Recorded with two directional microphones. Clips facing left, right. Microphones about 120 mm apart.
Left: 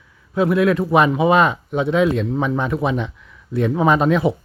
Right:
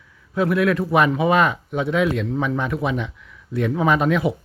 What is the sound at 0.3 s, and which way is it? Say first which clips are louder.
Speech: left 3 dB; 25° left (ahead or behind).